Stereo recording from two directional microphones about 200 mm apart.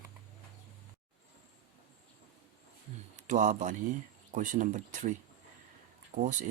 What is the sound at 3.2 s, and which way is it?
Speech, 40° right (ahead or behind).